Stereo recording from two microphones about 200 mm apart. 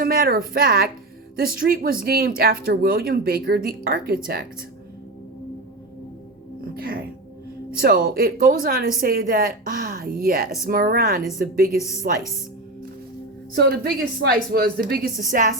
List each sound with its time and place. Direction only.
0.0 s a woman's voice: 50° right (ahead or behind)
6.7 s music: 50° right (ahead or behind)
7.8 s speech: 45° right (ahead or behind)
11.8 s a woman's voice: 15° left (ahead or behind)
13.5 s speech: 50° right (ahead or behind)